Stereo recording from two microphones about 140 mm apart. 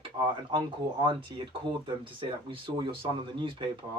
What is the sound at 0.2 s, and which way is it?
Speech, 35° right (ahead or behind).